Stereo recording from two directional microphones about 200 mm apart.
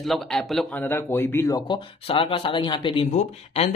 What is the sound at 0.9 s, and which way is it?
Speech, 10° left (ahead or behind).